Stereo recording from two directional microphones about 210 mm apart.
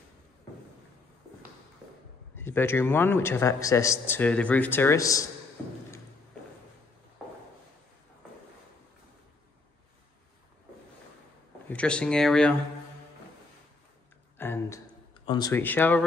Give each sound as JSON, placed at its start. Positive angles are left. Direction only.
{"t": 2.3, "sound": "a man's voice", "side_deg": 10}
{"t": 11.7, "sound": "speech", "side_deg": 5}
{"t": 14.4, "sound": "a sound", "side_deg": 10}
{"t": 15.2, "sound": "a man's voice", "side_deg": 20}